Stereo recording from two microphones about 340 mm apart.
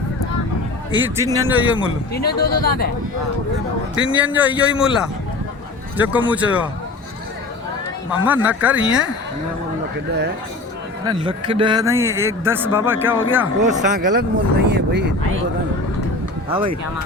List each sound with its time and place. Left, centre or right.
1.2 s speech: centre
2.1 s speech: left
4.0 s speech: centre
8.2 s speech: centre
10.1 s speech: right
11.0 s speech: centre
13.6 s speech: right
16.5 s speech: centre